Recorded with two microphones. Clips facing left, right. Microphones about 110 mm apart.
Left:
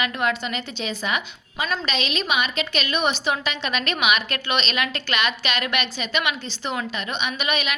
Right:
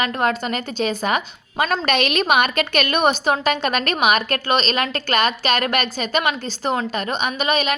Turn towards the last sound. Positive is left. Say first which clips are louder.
# right 5 dB
turn(degrees=-40)  # may be behind; listen again after turning